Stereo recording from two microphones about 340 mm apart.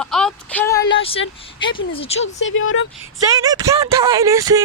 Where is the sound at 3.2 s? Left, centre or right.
Centre.